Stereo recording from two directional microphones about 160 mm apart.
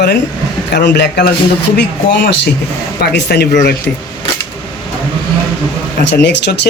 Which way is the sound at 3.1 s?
90° left.